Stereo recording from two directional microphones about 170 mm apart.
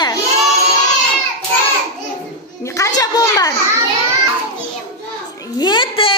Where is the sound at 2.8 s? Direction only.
20° left (ahead or behind).